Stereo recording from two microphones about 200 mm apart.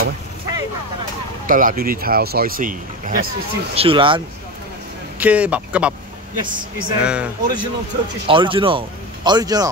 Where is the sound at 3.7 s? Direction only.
25° right (ahead or behind).